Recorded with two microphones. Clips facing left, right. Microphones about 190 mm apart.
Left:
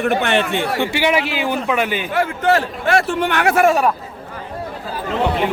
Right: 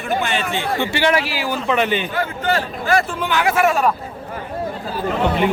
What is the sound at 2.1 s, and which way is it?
A man's voice, 75° left (ahead or behind).